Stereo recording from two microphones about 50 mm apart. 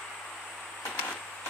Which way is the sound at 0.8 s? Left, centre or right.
Left.